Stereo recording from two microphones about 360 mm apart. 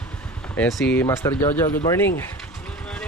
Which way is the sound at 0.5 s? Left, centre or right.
Centre.